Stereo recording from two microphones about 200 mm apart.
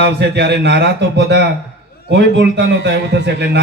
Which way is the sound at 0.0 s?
55° right (ahead or behind).